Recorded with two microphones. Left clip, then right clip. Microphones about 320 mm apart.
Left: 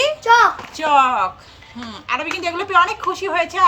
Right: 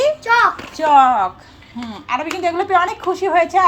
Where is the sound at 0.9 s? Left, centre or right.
Left.